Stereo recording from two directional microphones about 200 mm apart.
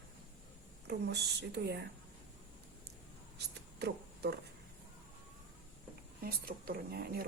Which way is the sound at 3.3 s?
55° right (ahead or behind).